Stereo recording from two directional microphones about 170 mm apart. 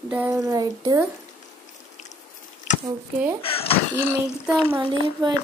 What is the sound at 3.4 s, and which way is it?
Speech, 35° left (ahead or behind).